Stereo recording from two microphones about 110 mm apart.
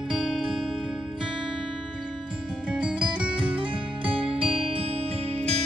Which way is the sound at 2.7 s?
5° right (ahead or behind).